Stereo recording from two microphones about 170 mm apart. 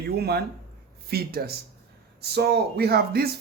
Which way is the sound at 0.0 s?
70° right (ahead or behind).